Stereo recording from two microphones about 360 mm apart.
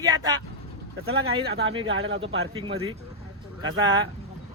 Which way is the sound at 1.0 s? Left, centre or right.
Right.